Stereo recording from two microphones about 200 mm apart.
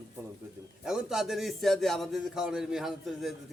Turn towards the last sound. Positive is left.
turn(degrees=0)  # may be behind; listen again after turning